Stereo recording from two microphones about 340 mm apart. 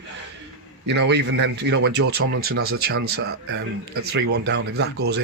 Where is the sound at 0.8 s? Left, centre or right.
Right.